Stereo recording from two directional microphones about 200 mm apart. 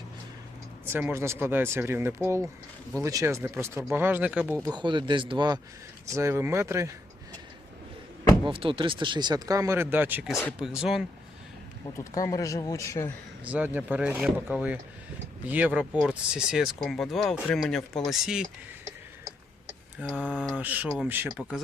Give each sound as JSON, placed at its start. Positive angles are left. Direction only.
{"t": 0.9, "sound": "speech", "side_deg": -10}
{"t": 4.7, "sound": "speech", "side_deg": -25}
{"t": 8.4, "sound": "speech", "side_deg": -25}
{"t": 11.9, "sound": "speech", "side_deg": 15}
{"t": 13.4, "sound": "speech", "side_deg": -5}
{"t": 20.0, "sound": "speech", "side_deg": -5}
{"t": 20.6, "sound": "speech", "side_deg": -10}